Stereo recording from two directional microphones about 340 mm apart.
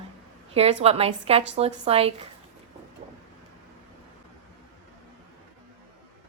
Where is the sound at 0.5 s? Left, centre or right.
Centre.